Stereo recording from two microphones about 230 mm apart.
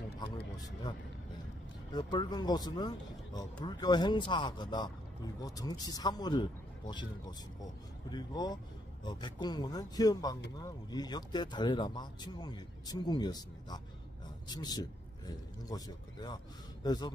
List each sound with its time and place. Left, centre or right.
1.9 s speech: centre